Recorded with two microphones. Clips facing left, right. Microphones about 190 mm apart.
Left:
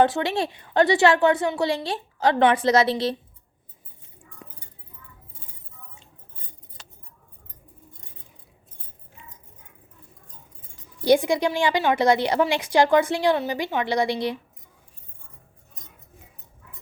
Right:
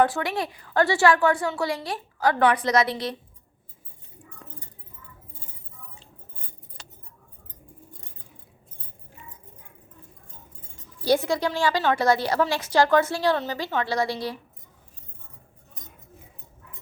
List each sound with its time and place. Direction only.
0.0 s a woman's voice: 25° left (ahead or behind)
4.4 s a sound: 10° left (ahead or behind)
11.0 s a woman's voice: 15° left (ahead or behind)